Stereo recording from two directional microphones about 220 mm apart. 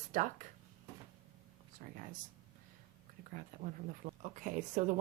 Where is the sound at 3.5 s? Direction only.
35° right (ahead or behind).